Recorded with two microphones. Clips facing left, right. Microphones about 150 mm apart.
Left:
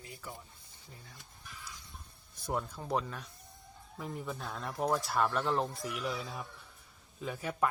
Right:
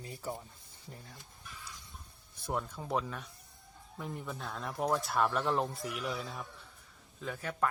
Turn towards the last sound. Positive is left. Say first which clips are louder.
# left 1 dB
turn(degrees=10)  # may be behind; listen again after turning